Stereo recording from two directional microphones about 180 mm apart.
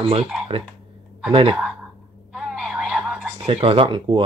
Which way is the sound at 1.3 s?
30° right (ahead or behind).